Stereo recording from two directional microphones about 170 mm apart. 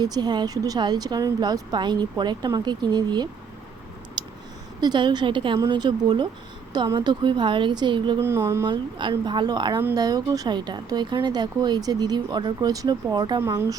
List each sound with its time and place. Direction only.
0.0 s speech: 25° right (ahead or behind)
4.2 s clicking: 25° right (ahead or behind)
4.8 s speech: 25° right (ahead or behind)
8.2 s speech: 15° right (ahead or behind)